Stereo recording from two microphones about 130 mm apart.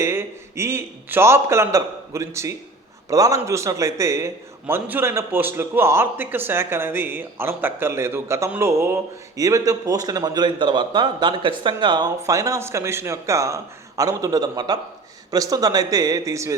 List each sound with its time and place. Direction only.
0.0 s a man's voice: 20° right (ahead or behind)